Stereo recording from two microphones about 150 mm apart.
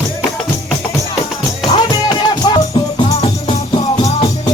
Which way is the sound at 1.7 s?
30° left (ahead or behind).